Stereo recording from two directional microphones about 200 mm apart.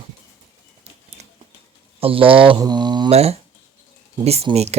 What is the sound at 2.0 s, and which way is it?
Speech, 25° right (ahead or behind).